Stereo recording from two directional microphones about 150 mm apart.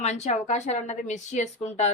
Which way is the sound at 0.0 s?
45° left (ahead or behind).